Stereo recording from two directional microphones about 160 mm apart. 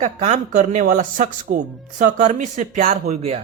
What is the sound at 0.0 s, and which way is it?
Speech, 45° right (ahead or behind).